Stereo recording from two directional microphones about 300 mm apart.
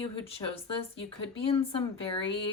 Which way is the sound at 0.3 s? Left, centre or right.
Centre.